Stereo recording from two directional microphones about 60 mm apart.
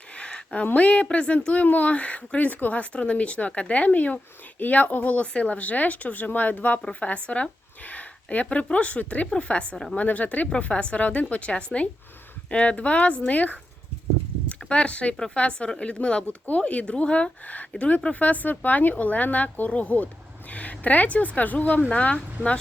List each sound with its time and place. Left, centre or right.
0.1 s a woman's voice: centre
14.6 s a woman's voice: centre